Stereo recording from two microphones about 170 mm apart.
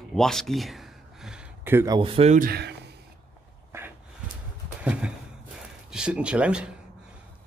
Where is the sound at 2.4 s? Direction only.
75° right (ahead or behind).